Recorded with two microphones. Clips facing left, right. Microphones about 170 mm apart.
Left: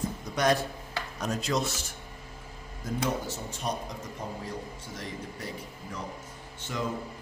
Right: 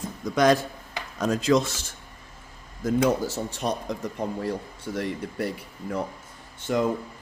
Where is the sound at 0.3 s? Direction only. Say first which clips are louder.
Right 6 dB; 90° right.